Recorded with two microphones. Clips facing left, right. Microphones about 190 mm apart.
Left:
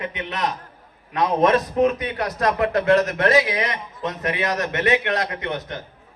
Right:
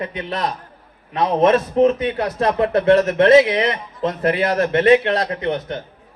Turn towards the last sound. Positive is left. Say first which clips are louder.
# right 6 dB
turn(degrees=-30)  # may be behind; listen again after turning